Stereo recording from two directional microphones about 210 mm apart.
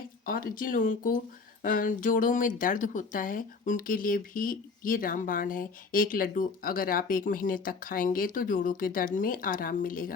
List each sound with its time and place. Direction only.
0.3 s speech: 40° left (ahead or behind)